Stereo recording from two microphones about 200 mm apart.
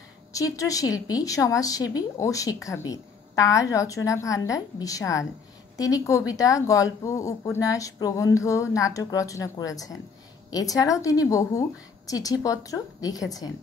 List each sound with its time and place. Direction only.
0.3 s speech: 15° left (ahead or behind)